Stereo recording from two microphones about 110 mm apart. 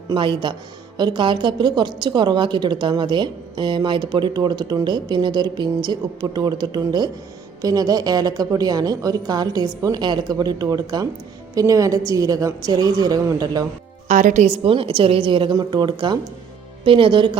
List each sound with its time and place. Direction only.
0.1 s a woman's voice: 45° right (ahead or behind)
14.1 s a woman's voice: 85° right; by 17.3 s 50° right (ahead or behind)